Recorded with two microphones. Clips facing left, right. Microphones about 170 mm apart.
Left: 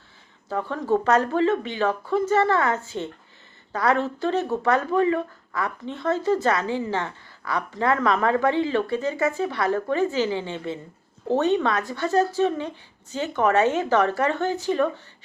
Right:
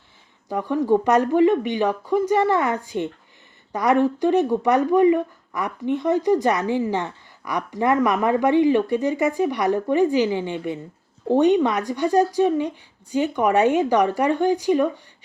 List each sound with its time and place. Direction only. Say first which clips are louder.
0.4 s speech: right 5 dB; 15° right (ahead or behind)